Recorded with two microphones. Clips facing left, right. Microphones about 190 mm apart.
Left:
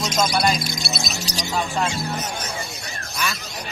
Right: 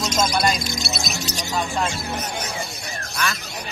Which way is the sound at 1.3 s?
35° left (ahead or behind).